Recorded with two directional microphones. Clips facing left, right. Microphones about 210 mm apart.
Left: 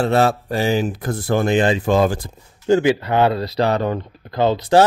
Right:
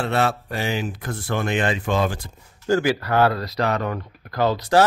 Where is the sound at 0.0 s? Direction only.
40° left (ahead or behind).